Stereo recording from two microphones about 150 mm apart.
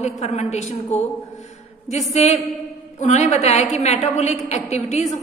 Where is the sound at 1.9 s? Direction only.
50° left (ahead or behind).